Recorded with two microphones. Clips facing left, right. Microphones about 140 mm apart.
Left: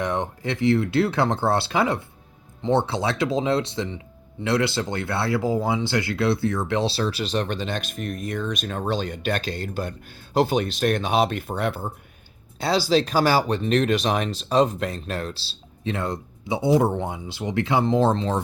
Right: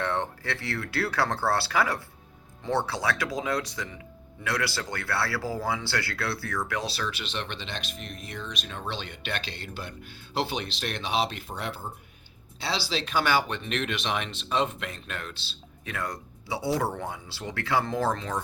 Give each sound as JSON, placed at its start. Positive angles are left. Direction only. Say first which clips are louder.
{"t": 0.0, "sound": "speech", "louder": "left 4 dB", "side_deg": 15}
{"t": 12.5, "sound": "speech", "louder": "left 10 dB", "side_deg": 45}